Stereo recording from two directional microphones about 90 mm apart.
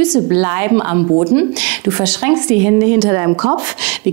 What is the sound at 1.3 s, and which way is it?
A woman's voice, 15° right (ahead or behind).